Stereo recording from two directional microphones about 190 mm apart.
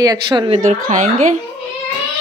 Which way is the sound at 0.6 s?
40° right (ahead or behind).